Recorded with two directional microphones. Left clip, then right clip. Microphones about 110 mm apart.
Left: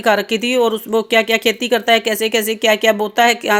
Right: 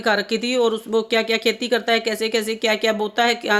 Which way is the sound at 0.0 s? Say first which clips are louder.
Left 5 dB; 30° left (ahead or behind).